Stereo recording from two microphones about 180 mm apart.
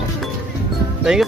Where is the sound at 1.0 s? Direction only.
5° right (ahead or behind).